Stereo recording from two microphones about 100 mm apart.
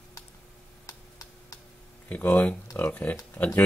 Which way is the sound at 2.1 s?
15° left (ahead or behind).